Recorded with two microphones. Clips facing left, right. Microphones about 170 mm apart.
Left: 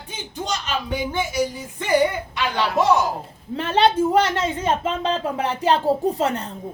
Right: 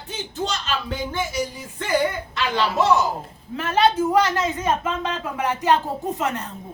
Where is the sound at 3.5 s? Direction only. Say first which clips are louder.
Left 1 dB; 30° left (ahead or behind).